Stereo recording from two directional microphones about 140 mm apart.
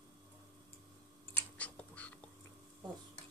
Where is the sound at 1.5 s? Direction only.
10° left (ahead or behind).